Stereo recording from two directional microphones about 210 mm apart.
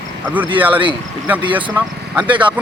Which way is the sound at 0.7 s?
25° right (ahead or behind).